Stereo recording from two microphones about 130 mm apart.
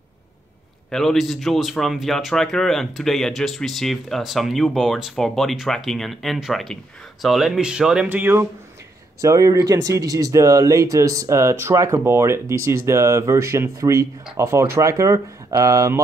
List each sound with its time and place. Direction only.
0.8 s a man's voice: 5° left (ahead or behind); by 16.0 s 25° right (ahead or behind)